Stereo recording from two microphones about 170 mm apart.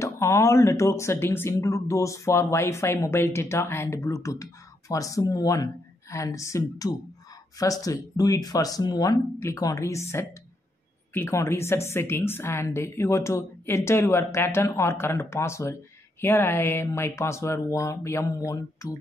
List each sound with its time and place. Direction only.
0.0 s speech: 15° left (ahead or behind)